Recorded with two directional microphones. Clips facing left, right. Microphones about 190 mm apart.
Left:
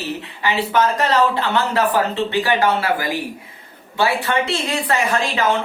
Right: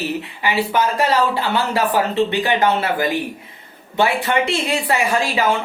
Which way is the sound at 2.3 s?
20° right (ahead or behind).